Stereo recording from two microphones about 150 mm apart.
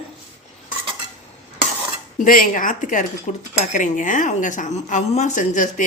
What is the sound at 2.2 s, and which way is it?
Speech, 65° left (ahead or behind).